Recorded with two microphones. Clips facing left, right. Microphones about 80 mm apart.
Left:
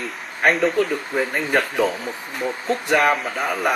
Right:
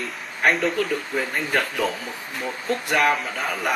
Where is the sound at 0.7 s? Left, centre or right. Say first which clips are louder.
Left 3 dB; left.